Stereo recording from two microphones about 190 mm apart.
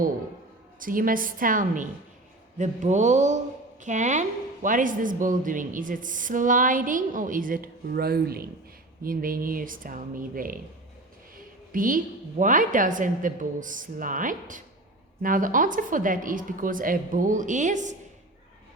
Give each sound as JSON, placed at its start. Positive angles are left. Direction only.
{"t": 0.8, "sound": "a woman's voice", "side_deg": -45}
{"t": 11.7, "sound": "a woman's voice", "side_deg": -45}